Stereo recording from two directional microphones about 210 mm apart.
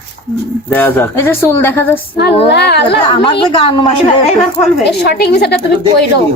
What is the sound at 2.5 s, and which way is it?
Speech, 50° left (ahead or behind).